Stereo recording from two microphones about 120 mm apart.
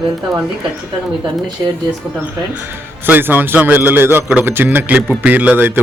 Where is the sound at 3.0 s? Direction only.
15° right (ahead or behind).